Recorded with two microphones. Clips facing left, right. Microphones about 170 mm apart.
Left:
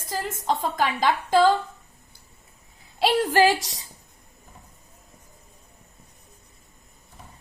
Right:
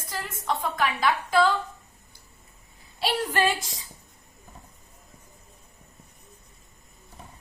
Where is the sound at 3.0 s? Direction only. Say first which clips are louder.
Left 6 dB; 90° left.